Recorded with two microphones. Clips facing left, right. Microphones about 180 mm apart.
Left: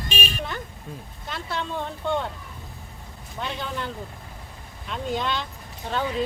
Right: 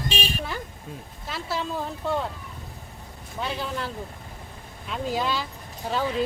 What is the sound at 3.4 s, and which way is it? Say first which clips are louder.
Speech: right 1 dB; 5° right (ahead or behind).